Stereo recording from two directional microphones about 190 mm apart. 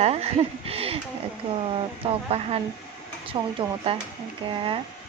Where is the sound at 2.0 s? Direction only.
30° right (ahead or behind).